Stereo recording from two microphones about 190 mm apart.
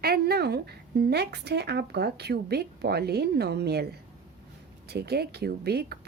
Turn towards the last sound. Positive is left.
turn(degrees=-55)  # may be behind; listen again after turning